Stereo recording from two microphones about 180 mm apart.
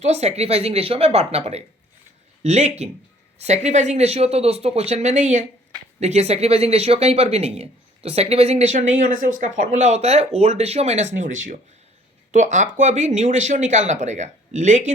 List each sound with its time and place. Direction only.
0.0 s speech: 40° right (ahead or behind)